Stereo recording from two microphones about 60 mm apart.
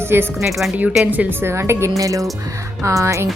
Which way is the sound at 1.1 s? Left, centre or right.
Right.